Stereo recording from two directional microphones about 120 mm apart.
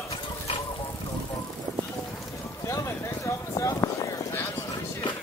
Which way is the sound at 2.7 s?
25° left (ahead or behind).